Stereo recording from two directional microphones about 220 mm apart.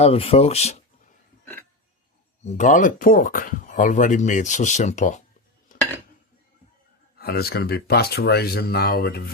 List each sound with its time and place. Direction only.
0.0 s speech: 25° left (ahead or behind)
2.4 s speech: 30° left (ahead or behind)
7.2 s speech: 45° left (ahead or behind)